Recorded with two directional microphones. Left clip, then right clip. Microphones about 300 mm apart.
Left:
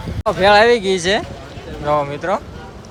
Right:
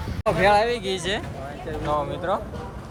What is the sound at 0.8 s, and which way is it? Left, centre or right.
Speech, centre.